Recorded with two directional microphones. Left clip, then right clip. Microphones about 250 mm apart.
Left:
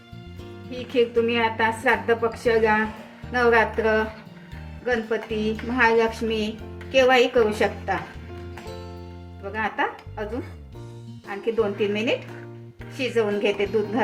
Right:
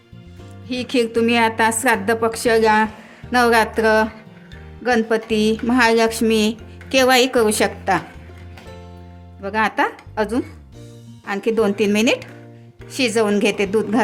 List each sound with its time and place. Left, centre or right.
0.7 s a woman's voice: right
9.4 s a woman's voice: right